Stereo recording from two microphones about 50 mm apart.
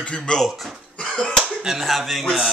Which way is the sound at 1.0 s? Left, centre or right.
Centre.